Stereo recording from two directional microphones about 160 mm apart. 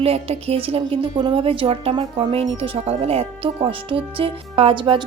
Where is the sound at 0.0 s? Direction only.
40° right (ahead or behind).